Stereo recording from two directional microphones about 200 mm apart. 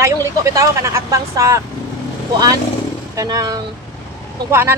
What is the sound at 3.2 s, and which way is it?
Speech, 20° right (ahead or behind).